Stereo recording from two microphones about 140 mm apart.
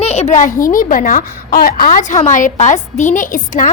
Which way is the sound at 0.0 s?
50° left (ahead or behind).